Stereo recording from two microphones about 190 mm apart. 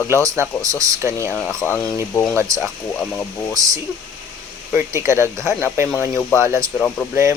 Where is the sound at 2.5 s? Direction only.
15° right (ahead or behind).